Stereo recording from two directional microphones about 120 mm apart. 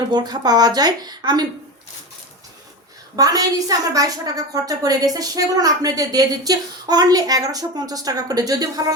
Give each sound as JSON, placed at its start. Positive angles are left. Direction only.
{"t": 0.1, "sound": "a woman's voice", "side_deg": -35}
{"t": 3.2, "sound": "a woman's voice", "side_deg": -30}